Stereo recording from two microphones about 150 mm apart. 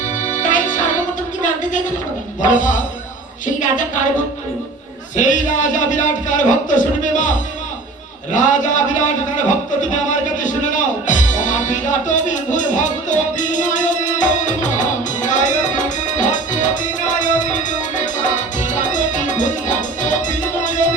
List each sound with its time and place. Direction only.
0.3 s music: 55° left (ahead or behind)
2.4 s speech: 60° left (ahead or behind)
5.1 s speech: 55° left (ahead or behind)
9.9 s music: 55° left (ahead or behind)